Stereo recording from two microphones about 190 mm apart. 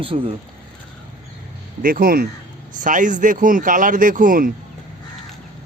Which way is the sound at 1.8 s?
50° right (ahead or behind).